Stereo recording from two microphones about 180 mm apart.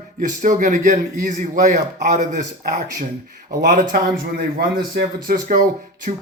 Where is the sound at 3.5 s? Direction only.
50° right (ahead or behind).